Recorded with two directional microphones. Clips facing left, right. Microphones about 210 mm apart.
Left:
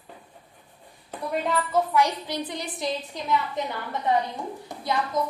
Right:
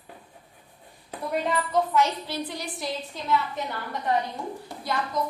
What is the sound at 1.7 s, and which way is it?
A woman's voice, 15° left (ahead or behind).